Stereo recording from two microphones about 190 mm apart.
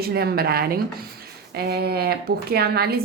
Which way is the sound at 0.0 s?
55° right (ahead or behind).